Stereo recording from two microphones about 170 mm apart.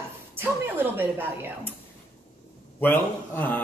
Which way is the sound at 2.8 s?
10° left (ahead or behind).